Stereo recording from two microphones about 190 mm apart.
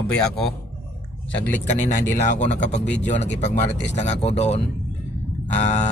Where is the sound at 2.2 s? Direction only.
40° left (ahead or behind).